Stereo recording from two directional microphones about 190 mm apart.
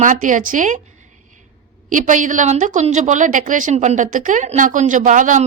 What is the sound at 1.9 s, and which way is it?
A woman's voice, 45° right (ahead or behind).